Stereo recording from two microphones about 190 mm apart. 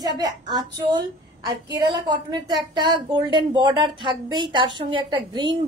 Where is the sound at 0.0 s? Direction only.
20° right (ahead or behind).